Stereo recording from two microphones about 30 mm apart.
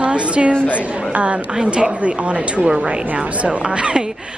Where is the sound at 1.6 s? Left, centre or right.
Right.